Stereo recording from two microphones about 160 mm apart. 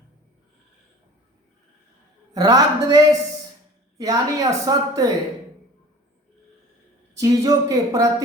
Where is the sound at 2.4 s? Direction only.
20° right (ahead or behind).